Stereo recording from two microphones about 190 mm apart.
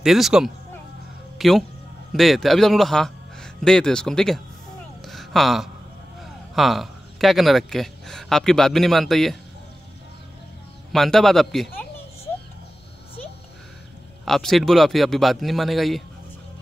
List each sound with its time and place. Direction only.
0.0 s a man's voice: centre (ahead or behind)
5.0 s a sound: centre (ahead or behind)
6.5 s a man's voice: centre (ahead or behind)
10.9 s a man's voice: centre (ahead or behind)
14.2 s a man's voice: centre (ahead or behind)